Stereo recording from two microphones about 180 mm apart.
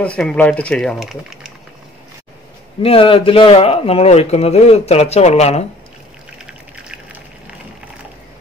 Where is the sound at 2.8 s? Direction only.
30° left (ahead or behind).